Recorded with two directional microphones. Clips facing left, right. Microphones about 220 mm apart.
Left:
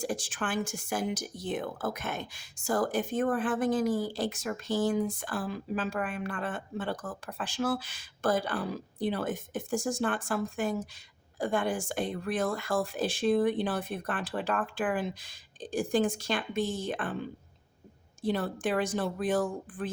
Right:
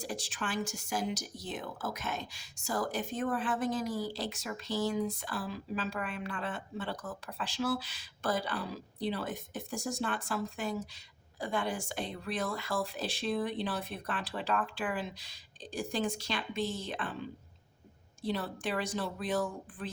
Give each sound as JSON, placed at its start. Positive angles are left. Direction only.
{"t": 0.0, "sound": "a woman's voice", "side_deg": 50}